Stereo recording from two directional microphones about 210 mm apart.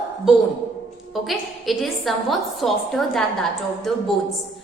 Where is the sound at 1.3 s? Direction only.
Centre (ahead or behind).